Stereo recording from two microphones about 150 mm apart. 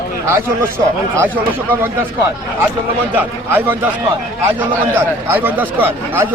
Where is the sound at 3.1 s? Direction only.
10° right (ahead or behind).